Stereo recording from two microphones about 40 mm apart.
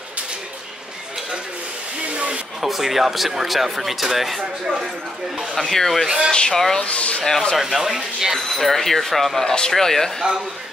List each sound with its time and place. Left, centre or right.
2.1 s hair dryer: right
2.6 s speech: centre
5.6 s speech: centre
6.0 s speech: centre
6.5 s speech: centre
6.8 s speech: left
7.5 s speech: centre
8.4 s speech: centre